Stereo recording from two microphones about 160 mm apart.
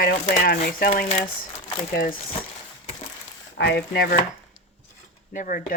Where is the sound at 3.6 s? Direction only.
90° left.